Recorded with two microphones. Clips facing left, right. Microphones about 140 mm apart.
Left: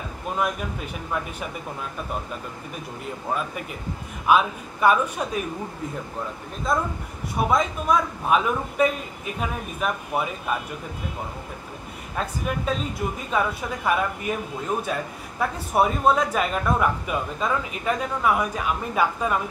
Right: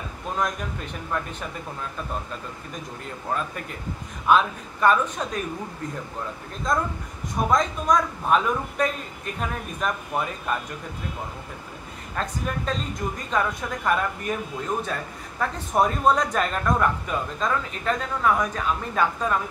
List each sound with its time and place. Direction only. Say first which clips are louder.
0.4 s a man's voice: left 1 dB; 5° left (ahead or behind)
4.3 s a man's voice: even; 10° left (ahead or behind)
6.7 s a man's voice: even; 5° left (ahead or behind)
12.2 s a man's voice: left 1 dB; 5° left (ahead or behind)